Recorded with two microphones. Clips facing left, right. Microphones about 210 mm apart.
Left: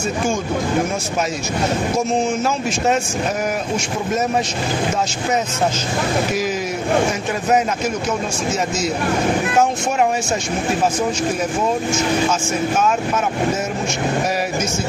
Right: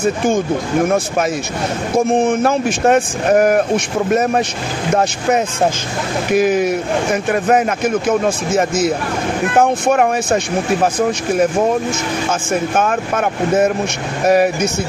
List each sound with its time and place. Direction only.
2.0 s speech: 55° right (ahead or behind)
6.3 s speech: 60° right (ahead or behind)
9.6 s speech: 55° right (ahead or behind)
12.7 s speech: 55° right (ahead or behind)